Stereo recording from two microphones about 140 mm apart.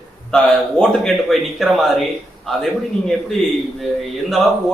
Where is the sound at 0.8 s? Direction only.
Centre (ahead or behind).